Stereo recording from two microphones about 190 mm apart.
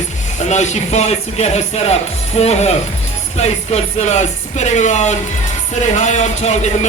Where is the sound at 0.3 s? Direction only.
40° left (ahead or behind).